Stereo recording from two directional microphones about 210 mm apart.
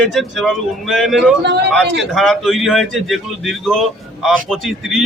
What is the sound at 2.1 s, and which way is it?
Speech, centre (ahead or behind).